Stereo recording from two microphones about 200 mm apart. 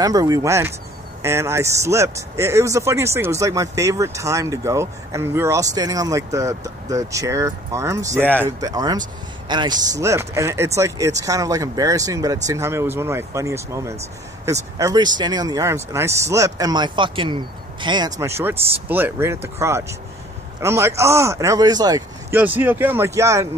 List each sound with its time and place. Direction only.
0.0 s speech: 20° right (ahead or behind)